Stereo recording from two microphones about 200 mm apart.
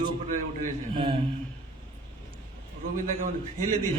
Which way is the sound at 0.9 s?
25° right (ahead or behind).